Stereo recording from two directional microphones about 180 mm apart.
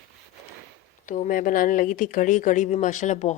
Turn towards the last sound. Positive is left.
turn(degrees=40)  # may be behind; listen again after turning